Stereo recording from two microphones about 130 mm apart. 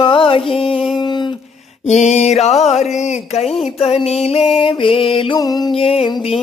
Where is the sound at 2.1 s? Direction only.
55° left (ahead or behind).